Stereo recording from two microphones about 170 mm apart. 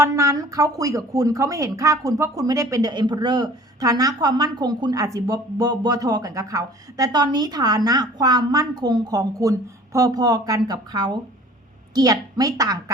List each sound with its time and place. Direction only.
0.0 s a woman's voice: 20° right (ahead or behind)